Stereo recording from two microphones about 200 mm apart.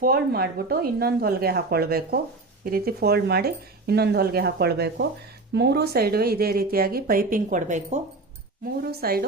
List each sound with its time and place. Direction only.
0.0 s a woman's voice: 50° right (ahead or behind); by 8.0 s 35° right (ahead or behind)
8.8 s a woman's voice: 50° right (ahead or behind)